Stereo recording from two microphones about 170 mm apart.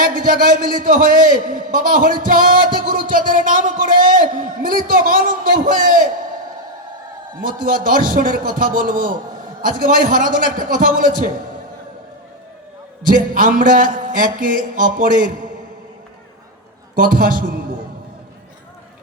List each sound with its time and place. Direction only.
0.0 s a man's voice: 55° right (ahead or behind)
7.4 s a man's voice: 55° right (ahead or behind)
13.0 s a man's voice: 55° right (ahead or behind)
16.9 s a man's voice: 55° right (ahead or behind)